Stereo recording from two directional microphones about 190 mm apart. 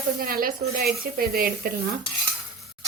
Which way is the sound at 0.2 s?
50° right (ahead or behind).